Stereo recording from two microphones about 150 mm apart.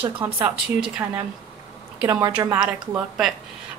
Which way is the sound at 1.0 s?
15° right (ahead or behind).